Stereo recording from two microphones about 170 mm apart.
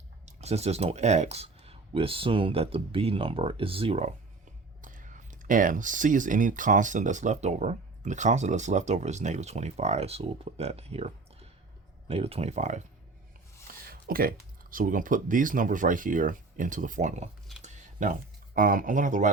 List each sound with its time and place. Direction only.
0.3 s speech: 40° right (ahead or behind)
4.8 s speech: 50° right (ahead or behind)
13.9 s speech: 60° right (ahead or behind)
17.6 s a sound: 45° right (ahead or behind)